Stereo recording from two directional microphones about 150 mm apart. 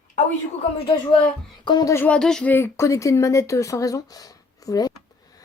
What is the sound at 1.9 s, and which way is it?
Speech, 10° left (ahead or behind).